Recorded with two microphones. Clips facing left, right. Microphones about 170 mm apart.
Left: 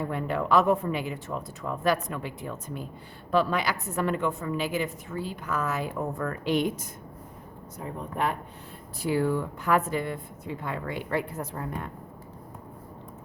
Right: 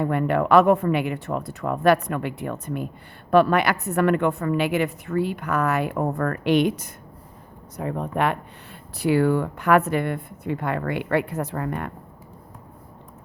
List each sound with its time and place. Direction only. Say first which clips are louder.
0.0 s a woman's voice: right 7 dB; 65° right (ahead or behind)